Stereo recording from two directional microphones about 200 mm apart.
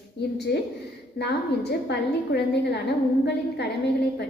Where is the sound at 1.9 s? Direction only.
55° left (ahead or behind).